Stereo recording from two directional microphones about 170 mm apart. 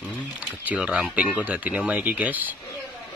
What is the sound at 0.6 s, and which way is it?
Speech, 5° right (ahead or behind).